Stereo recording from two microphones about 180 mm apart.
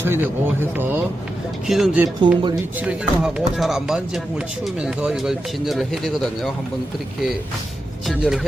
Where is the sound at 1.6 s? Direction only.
Centre (ahead or behind).